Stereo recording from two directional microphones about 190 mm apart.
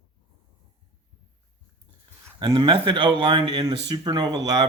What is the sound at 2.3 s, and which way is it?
Speech, 25° right (ahead or behind).